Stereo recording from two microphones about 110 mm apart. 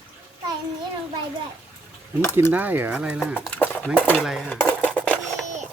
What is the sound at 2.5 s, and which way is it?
Speech, 15° right (ahead or behind).